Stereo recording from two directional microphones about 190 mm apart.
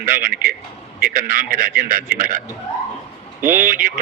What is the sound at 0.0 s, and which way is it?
A man's voice, 45° right (ahead or behind).